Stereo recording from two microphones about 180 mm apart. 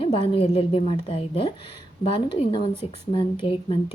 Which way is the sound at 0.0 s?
30° left (ahead or behind).